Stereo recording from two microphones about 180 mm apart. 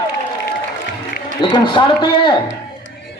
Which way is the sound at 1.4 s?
25° left (ahead or behind).